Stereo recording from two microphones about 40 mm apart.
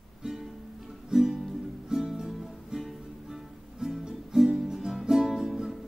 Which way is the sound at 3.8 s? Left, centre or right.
Centre.